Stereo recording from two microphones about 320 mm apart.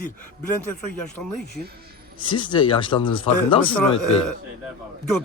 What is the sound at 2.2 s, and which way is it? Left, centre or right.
A man's voice, centre.